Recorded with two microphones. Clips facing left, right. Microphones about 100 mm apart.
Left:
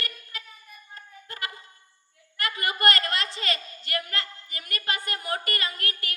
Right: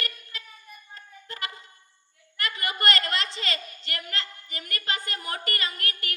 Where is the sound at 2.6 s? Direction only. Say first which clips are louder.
Left 2 dB; 25° right (ahead or behind).